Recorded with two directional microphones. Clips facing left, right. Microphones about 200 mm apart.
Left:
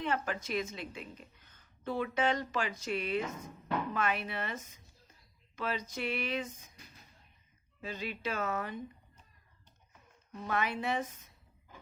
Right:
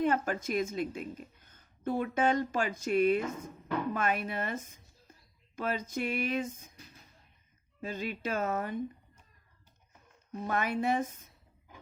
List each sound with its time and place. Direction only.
0.0 s a woman's voice: 45° right (ahead or behind)
7.8 s a woman's voice: 45° right (ahead or behind)
10.4 s a woman's voice: 45° right (ahead or behind)